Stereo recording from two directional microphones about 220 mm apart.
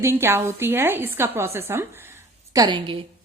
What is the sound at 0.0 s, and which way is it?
A woman's voice, 10° right (ahead or behind).